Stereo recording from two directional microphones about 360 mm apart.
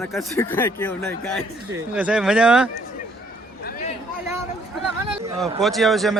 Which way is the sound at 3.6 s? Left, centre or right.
Left.